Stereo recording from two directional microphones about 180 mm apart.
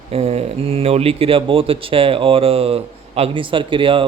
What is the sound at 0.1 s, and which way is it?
Speech, 35° right (ahead or behind).